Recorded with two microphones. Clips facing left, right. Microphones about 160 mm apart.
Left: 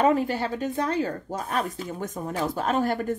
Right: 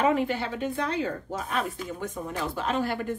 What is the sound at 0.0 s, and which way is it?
Speech, 40° left (ahead or behind).